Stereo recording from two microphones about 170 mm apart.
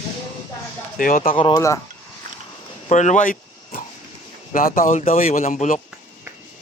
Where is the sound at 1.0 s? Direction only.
55° left (ahead or behind).